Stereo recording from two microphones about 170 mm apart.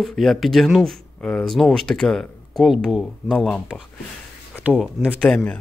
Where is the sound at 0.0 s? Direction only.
Centre (ahead or behind).